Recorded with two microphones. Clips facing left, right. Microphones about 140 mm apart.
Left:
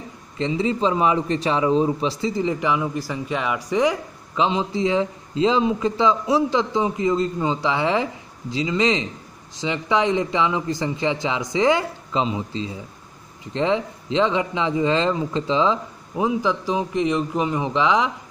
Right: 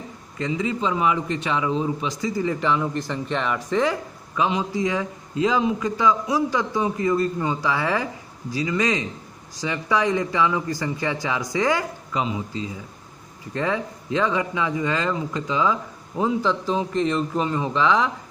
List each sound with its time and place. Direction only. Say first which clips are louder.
0.4 s a man's voice: left 3 dB; 30° left (ahead or behind)